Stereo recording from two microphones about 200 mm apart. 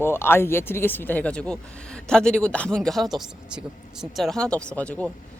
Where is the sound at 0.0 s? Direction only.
10° left (ahead or behind).